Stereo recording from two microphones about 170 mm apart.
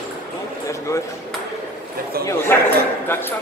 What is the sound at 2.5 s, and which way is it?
Speech, 10° left (ahead or behind).